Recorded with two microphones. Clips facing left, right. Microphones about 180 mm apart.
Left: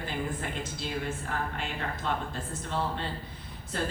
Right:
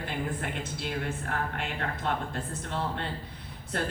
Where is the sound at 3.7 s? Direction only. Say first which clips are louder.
Right 1 dB; 60° right (ahead or behind).